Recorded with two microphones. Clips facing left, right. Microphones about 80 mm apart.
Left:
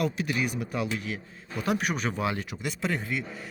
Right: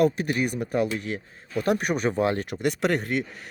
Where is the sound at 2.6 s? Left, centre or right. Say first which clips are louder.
Right 8 dB; right.